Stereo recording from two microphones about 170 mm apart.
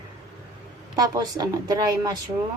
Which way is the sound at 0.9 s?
20° right (ahead or behind).